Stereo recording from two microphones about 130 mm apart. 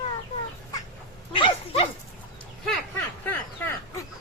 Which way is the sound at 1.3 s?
45° left (ahead or behind).